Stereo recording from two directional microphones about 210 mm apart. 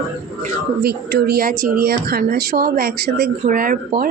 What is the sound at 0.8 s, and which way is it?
Speech, 50° right (ahead or behind).